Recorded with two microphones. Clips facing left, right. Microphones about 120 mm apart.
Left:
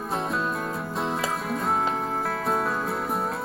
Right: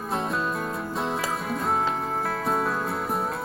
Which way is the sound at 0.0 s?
Centre (ahead or behind).